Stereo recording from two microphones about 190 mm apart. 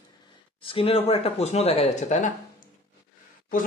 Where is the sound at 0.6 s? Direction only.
30° left (ahead or behind).